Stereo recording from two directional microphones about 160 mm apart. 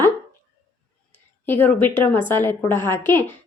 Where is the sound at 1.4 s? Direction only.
15° left (ahead or behind).